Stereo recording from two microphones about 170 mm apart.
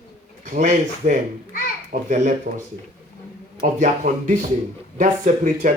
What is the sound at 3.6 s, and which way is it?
Speech, 50° right (ahead or behind).